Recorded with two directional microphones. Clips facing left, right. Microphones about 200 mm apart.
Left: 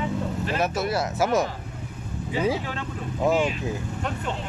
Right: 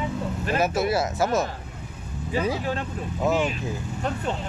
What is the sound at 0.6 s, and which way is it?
Speech, 5° right (ahead or behind).